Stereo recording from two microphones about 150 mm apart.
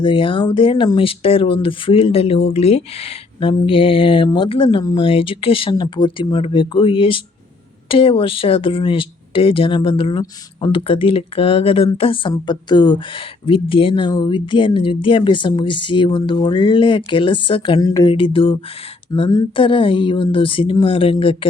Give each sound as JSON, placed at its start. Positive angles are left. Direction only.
{"t": 0.0, "sound": "speech", "side_deg": 35}
{"t": 17.7, "sound": "speech", "side_deg": 20}
{"t": 18.1, "sound": "speech", "side_deg": 35}